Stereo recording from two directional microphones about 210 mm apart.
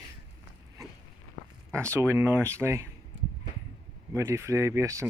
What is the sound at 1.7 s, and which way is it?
Speech, 10° right (ahead or behind).